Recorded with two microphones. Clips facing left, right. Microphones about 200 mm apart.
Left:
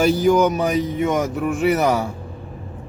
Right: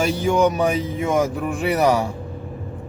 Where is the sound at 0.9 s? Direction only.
30° right (ahead or behind).